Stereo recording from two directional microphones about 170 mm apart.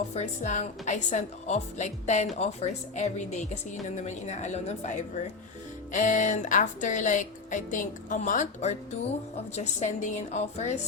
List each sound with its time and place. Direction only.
0.1 s speech: 40° left (ahead or behind)